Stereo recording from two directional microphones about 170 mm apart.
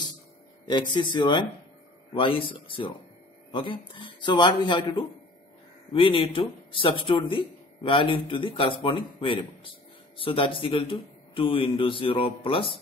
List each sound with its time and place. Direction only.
0.7 s speech: 25° left (ahead or behind)